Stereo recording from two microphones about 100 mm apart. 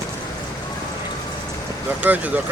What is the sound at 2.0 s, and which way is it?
Speech, 15° right (ahead or behind).